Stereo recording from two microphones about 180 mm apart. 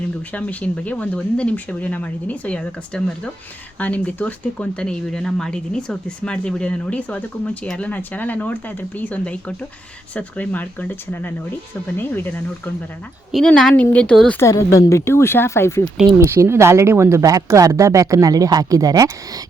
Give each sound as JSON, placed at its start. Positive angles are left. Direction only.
{"t": 0.3, "sound": "speech", "side_deg": 10}
{"t": 16.0, "sound": "speech", "side_deg": -15}